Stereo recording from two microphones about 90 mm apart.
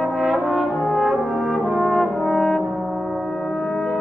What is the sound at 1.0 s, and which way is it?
Brass instrument, 5° right (ahead or behind).